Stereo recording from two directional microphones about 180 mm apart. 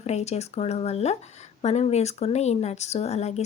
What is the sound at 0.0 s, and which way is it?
Speech, 35° left (ahead or behind).